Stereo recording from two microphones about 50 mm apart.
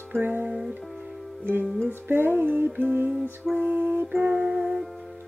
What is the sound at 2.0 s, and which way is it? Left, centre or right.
Music, right.